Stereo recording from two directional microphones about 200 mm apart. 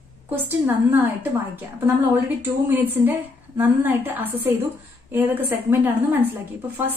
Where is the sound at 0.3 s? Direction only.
10° right (ahead or behind).